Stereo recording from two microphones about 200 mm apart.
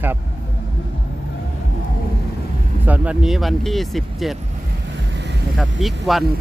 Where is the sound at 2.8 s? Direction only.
5° right (ahead or behind).